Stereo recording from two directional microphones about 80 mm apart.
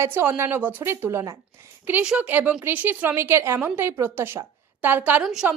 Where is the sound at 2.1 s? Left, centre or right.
Centre.